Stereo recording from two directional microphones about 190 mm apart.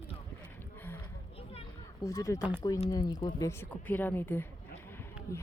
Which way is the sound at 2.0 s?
20° left (ahead or behind).